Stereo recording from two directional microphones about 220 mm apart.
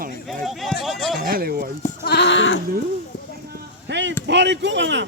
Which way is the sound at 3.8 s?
55° right (ahead or behind).